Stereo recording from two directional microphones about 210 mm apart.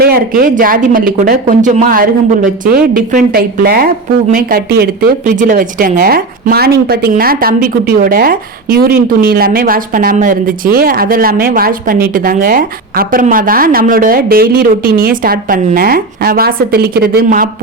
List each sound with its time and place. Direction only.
0.0 s a woman's voice: 45° right (ahead or behind)